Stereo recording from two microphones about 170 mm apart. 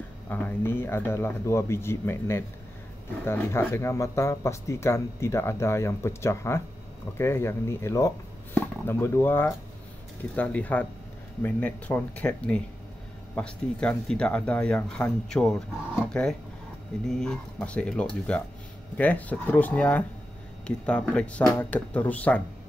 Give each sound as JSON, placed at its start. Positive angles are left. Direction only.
{"t": 0.3, "sound": "speech", "side_deg": 10}